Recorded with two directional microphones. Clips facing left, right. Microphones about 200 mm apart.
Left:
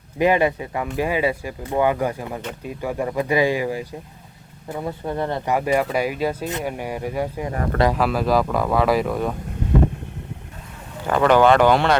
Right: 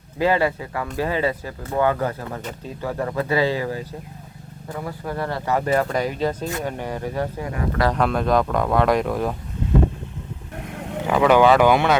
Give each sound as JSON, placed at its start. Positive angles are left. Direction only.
{"t": 0.2, "sound": "speech", "side_deg": 20}
{"t": 7.5, "sound": "speech", "side_deg": 50}
{"t": 7.9, "sound": "speech", "side_deg": 5}
{"t": 10.6, "sound": "vehicle", "side_deg": -65}
{"t": 11.0, "sound": "speech", "side_deg": -5}